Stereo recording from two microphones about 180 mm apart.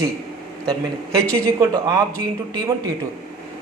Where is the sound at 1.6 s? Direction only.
20° right (ahead or behind).